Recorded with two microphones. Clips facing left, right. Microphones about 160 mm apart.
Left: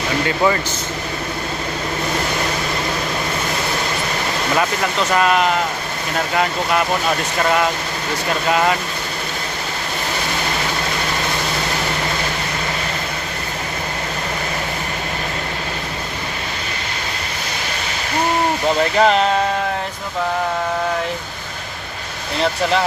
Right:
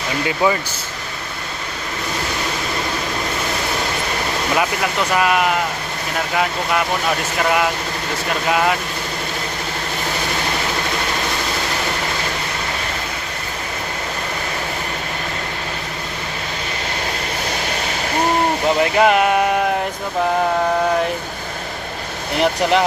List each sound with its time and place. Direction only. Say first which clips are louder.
0.3 s speech: even; 10° right (ahead or behind)
4.5 s speech: even; 10° right (ahead or behind)
8.4 s speech: left 1 dB; centre (ahead or behind)
18.8 s speech: even; 10° right (ahead or behind)
22.4 s speech: right 2 dB; 15° right (ahead or behind)